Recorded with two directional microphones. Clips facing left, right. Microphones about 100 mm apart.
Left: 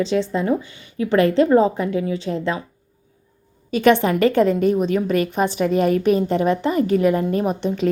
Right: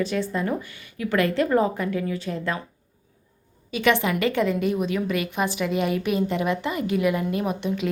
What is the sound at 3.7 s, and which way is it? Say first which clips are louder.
A woman's voice: left 6 dB; 35° left (ahead or behind).